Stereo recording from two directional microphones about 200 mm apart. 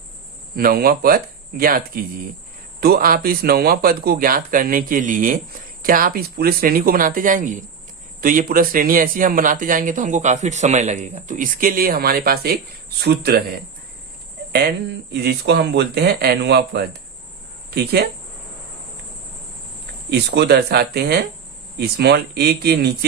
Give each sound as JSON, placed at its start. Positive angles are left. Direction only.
{"t": 0.5, "sound": "a man's voice", "side_deg": -50}
{"t": 2.8, "sound": "a man's voice", "side_deg": -50}
{"t": 15.1, "sound": "speech", "side_deg": -55}
{"t": 20.1, "sound": "a man's voice", "side_deg": -55}